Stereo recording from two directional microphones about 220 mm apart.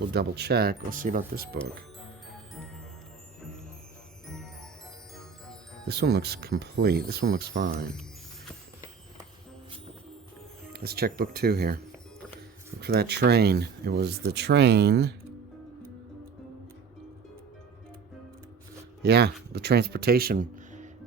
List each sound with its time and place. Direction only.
0.1 s speech: 45° right (ahead or behind)
5.1 s chime: centre (ahead or behind)
5.9 s speech: 50° right (ahead or behind)
10.7 s speech: 45° right (ahead or behind)
12.8 s speech: 45° right (ahead or behind)
19.0 s speech: 50° right (ahead or behind)